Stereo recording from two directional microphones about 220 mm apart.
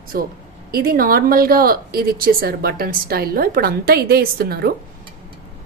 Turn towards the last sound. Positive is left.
turn(degrees=-45)  # may be behind; listen again after turning